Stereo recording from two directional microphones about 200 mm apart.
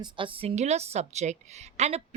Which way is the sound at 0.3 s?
30° right (ahead or behind).